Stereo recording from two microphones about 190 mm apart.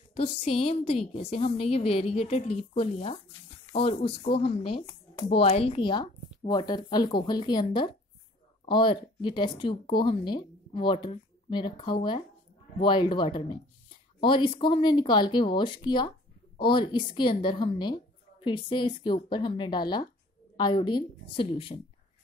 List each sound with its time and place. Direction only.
0.1 s a woman's voice: 30° left (ahead or behind)